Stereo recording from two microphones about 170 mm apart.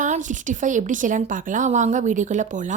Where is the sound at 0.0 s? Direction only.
45° right (ahead or behind).